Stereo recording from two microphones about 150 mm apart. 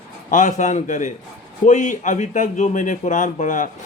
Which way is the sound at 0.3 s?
55° left (ahead or behind).